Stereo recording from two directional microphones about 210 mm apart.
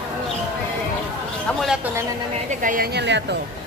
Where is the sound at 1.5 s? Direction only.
Centre (ahead or behind).